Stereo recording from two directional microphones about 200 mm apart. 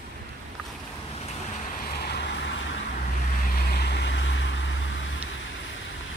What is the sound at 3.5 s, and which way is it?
Vehicle, 50° left (ahead or behind).